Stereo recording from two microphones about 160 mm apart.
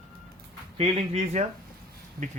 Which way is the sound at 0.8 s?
40° right (ahead or behind).